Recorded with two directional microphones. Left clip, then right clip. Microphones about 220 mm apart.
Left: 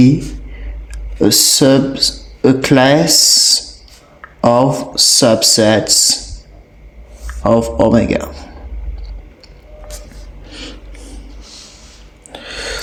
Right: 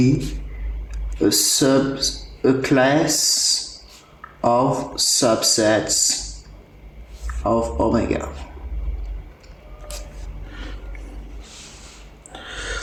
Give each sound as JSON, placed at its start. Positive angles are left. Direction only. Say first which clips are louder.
{"t": 1.2, "sound": "speech", "louder": "left 7 dB", "side_deg": 45}
{"t": 7.4, "sound": "speech", "louder": "left 8 dB", "side_deg": 45}
{"t": 12.3, "sound": "a sound", "louder": "left 6 dB", "side_deg": 30}